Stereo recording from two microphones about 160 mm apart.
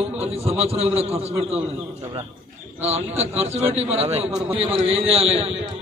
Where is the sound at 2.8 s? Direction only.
40° right (ahead or behind).